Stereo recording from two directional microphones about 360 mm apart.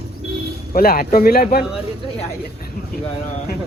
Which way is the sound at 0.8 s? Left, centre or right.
Left.